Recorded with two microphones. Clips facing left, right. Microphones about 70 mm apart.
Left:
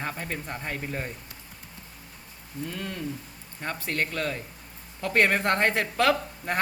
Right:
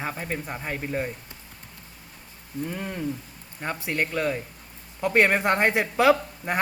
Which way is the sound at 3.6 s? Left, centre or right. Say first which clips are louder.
Right 2 dB; centre.